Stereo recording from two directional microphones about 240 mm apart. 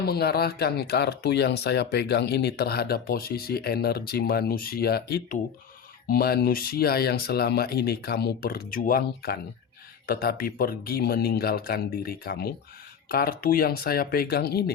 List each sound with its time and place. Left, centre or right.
0.0 s speech: left